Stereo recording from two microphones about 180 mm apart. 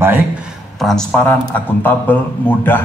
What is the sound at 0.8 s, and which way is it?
A man's voice, centre (ahead or behind).